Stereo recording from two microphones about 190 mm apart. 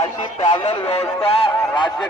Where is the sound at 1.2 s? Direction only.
30° left (ahead or behind).